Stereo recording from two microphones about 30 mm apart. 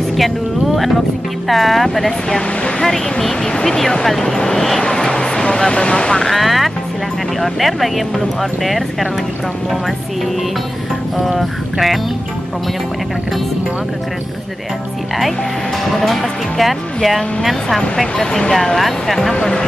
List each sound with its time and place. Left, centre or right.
1.5 s speech: centre
2.2 s speech: left
2.8 s speech: centre
4.4 s speech: left
4.9 s music: centre
5.7 s speech: left
6.3 s speech: centre
11.1 s speech: centre
16.0 s speech: centre
18.1 s speech: left
18.8 s speech: centre